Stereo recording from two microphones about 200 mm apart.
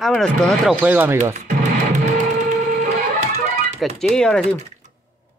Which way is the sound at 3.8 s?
Centre (ahead or behind).